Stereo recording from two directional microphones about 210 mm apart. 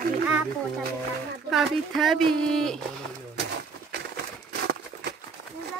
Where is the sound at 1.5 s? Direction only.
Centre (ahead or behind).